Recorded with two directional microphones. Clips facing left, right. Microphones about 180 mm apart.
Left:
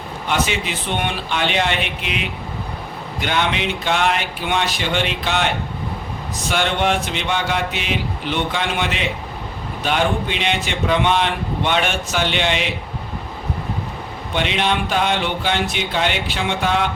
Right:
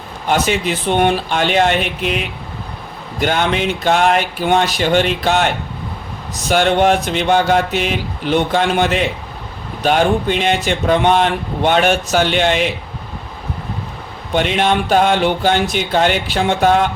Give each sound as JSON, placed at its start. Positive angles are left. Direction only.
{"t": 0.3, "sound": "speech", "side_deg": -45}
{"t": 14.3, "sound": "speech", "side_deg": -45}